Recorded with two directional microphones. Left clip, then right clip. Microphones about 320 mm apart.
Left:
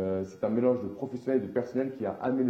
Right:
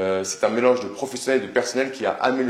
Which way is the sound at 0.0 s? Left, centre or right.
Centre.